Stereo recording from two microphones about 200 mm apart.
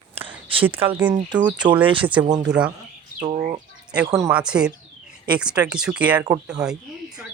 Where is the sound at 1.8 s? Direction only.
25° right (ahead or behind).